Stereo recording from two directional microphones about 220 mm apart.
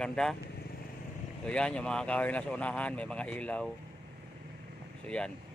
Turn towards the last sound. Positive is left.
turn(degrees=5)  # may be behind; listen again after turning